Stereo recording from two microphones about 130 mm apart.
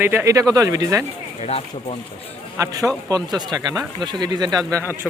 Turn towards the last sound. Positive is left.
turn(degrees=-30)  # may be behind; listen again after turning